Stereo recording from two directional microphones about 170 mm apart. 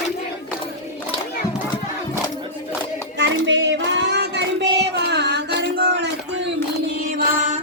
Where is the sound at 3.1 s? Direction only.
90° right.